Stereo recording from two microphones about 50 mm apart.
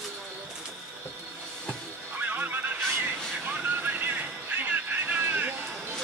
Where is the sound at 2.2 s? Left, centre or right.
Right.